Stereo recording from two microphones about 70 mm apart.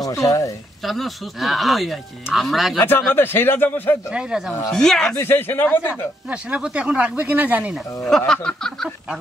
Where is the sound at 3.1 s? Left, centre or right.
Left.